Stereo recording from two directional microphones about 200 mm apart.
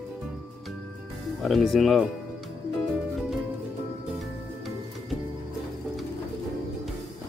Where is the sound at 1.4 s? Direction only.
Centre (ahead or behind).